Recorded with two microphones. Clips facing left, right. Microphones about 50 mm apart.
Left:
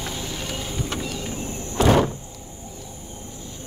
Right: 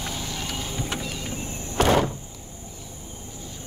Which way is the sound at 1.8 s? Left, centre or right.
Right.